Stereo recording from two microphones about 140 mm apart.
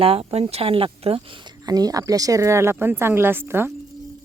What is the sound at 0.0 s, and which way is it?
Speech, 45° right (ahead or behind).